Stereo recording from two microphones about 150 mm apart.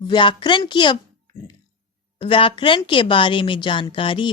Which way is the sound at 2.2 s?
35° left (ahead or behind).